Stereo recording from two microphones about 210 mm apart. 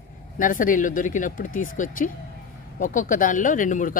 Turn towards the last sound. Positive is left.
turn(degrees=40)  # may be behind; listen again after turning